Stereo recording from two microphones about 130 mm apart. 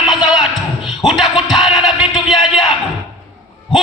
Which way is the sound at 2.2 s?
35° left (ahead or behind).